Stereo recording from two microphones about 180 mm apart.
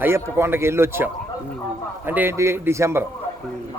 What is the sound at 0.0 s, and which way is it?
Speech, 15° right (ahead or behind).